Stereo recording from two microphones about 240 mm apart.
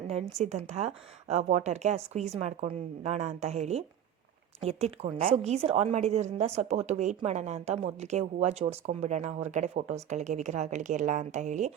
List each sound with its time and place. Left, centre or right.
0.1 s a woman's voice: right